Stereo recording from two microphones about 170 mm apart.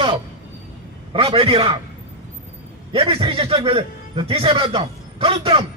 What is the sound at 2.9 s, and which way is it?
A man's voice, 35° right (ahead or behind).